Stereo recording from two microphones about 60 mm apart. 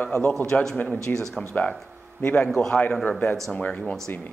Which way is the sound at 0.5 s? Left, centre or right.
Centre.